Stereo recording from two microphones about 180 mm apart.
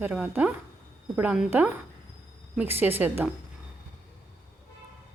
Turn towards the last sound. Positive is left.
turn(degrees=-10)  # may be behind; listen again after turning